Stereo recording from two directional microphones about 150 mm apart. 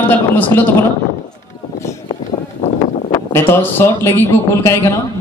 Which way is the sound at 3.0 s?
25° left (ahead or behind).